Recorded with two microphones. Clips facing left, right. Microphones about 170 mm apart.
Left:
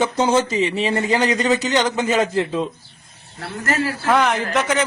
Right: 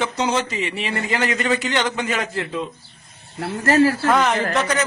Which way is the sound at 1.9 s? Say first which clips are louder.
Left 6 dB; 25° left (ahead or behind).